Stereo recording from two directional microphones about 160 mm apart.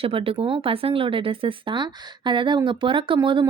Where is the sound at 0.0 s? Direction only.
35° right (ahead or behind).